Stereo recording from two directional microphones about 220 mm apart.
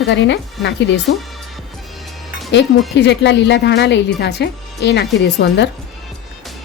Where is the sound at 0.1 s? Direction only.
55° left (ahead or behind).